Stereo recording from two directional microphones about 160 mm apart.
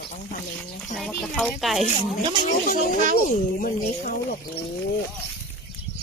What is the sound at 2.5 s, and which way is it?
Speech, 60° left (ahead or behind).